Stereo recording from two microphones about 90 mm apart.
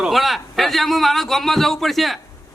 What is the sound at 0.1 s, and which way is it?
A man's voice, centre (ahead or behind).